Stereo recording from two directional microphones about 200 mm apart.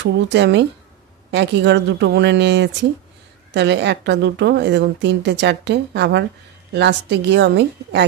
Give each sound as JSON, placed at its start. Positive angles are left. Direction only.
{"t": 0.0, "sound": "a woman's voice", "side_deg": -60}